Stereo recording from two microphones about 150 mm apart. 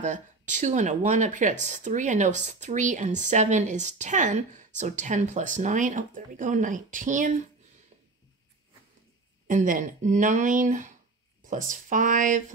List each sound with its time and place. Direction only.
0.0 s speech: 55° right (ahead or behind)
9.5 s speech: 60° right (ahead or behind)